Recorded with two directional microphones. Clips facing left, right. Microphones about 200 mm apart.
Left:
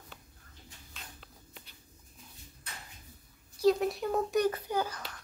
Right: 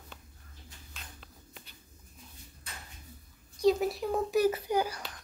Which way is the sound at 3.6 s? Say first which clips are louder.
Even; centre (ahead or behind).